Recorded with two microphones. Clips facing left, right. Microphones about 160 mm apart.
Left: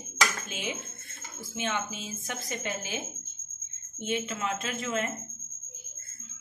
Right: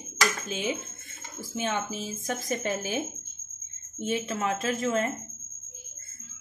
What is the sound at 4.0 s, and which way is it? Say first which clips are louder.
A woman's voice: right 3 dB; 40° right (ahead or behind).